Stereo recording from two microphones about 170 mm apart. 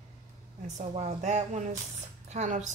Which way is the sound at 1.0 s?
40° right (ahead or behind).